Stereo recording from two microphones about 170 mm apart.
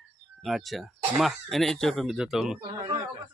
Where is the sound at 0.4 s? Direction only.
Centre (ahead or behind).